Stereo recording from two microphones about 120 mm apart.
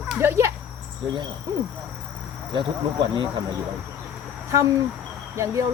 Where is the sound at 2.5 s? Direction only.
40° right (ahead or behind).